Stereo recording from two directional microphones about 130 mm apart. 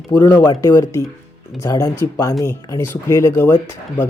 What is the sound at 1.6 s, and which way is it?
Speech, 25° left (ahead or behind).